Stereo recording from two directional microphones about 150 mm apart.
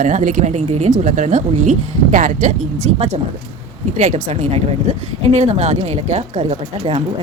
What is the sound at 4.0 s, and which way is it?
Speech, 50° right (ahead or behind).